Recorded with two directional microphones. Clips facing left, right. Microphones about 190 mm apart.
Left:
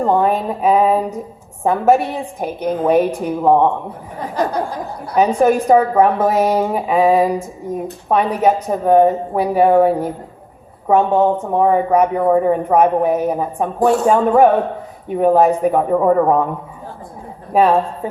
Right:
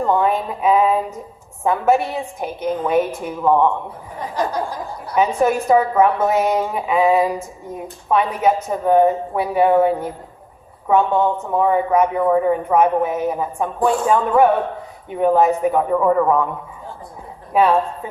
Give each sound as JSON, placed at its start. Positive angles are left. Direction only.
{"t": 0.0, "sound": "speech", "side_deg": 35}
{"t": 5.1, "sound": "speech", "side_deg": 40}
{"t": 17.5, "sound": "speech", "side_deg": 35}